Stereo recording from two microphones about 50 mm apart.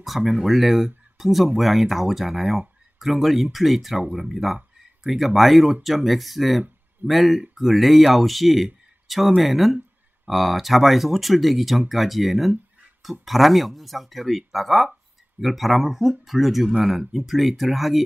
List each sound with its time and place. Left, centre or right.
0.0 s speech: centre
9.0 s a sound: centre
9.4 s speech: centre